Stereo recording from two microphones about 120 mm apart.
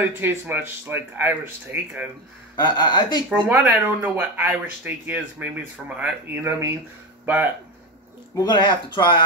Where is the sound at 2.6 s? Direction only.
40° left (ahead or behind).